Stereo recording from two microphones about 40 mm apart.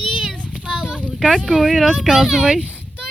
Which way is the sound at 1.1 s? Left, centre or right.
Centre.